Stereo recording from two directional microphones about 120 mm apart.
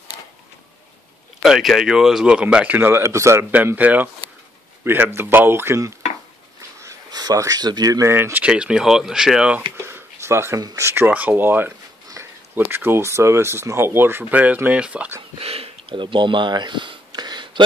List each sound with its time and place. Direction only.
1.4 s speech: centre (ahead or behind)
9.8 s speech: 20° right (ahead or behind)
15.4 s a sound: 55° right (ahead or behind); by 17.6 s 40° right (ahead or behind)